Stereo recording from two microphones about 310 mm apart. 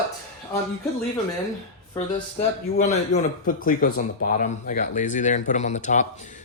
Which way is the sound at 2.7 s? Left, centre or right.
Left.